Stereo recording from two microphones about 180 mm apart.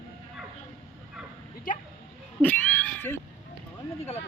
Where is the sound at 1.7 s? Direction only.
50° left (ahead or behind).